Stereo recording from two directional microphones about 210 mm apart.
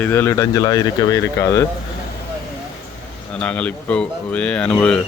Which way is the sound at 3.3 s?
5° left (ahead or behind).